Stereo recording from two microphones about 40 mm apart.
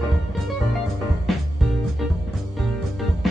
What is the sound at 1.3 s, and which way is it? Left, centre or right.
Music, centre.